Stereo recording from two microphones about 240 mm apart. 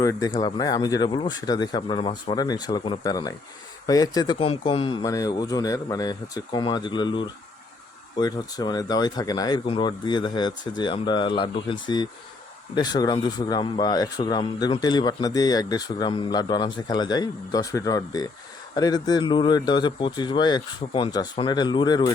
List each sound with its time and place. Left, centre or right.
0.0 s speech: centre